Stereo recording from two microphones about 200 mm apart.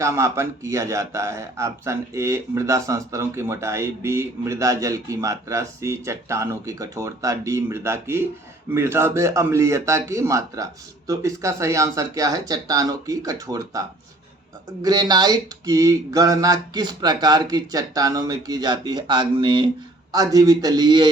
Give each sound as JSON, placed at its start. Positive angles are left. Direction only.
{"t": 0.0, "sound": "a man's voice", "side_deg": -15}